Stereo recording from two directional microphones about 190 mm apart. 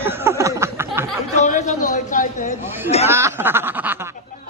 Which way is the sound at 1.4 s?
40° left (ahead or behind).